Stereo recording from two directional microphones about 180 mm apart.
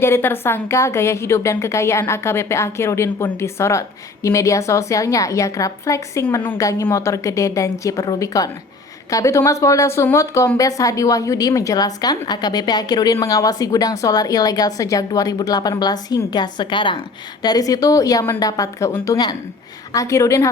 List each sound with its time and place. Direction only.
0.0 s a woman's voice: 10° left (ahead or behind)